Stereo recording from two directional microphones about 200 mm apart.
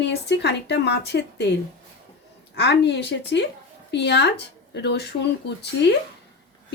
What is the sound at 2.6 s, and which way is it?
Speech, 55° left (ahead or behind).